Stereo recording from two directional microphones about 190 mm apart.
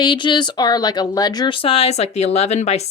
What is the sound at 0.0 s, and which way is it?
Speech, 25° left (ahead or behind).